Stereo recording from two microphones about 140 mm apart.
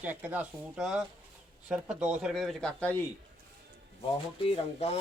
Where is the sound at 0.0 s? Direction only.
10° right (ahead or behind); by 3.0 s 10° left (ahead or behind).